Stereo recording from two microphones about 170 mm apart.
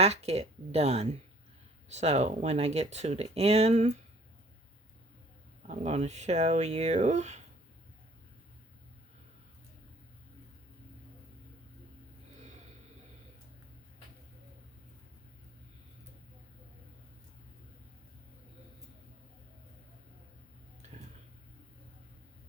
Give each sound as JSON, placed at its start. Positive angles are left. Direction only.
{"t": 0.0, "sound": "speech", "side_deg": -40}
{"t": 5.6, "sound": "speech", "side_deg": -40}